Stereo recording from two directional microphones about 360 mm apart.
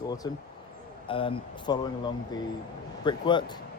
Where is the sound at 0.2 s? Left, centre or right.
Centre.